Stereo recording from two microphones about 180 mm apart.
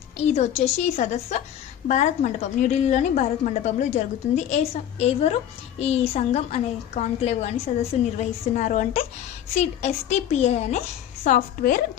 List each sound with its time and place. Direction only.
0.3 s a woman's voice: 35° left (ahead or behind)
11.2 s a woman's voice: 50° left (ahead or behind)